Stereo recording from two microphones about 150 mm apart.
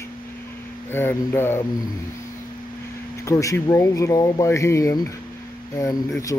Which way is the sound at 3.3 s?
20° left (ahead or behind).